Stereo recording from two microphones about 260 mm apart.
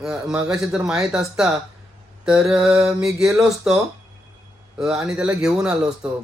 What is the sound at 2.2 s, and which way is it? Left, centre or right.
Mantra, centre.